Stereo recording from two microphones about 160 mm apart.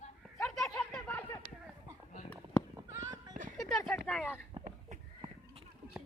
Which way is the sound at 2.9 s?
20° right (ahead or behind).